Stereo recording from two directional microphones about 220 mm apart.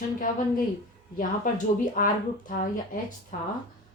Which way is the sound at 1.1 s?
35° left (ahead or behind).